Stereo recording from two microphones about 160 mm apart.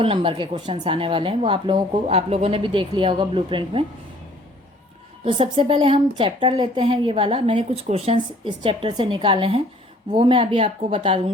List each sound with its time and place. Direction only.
0.0 s a woman's voice: 35° right (ahead or behind)
5.2 s a woman's voice: 35° right (ahead or behind)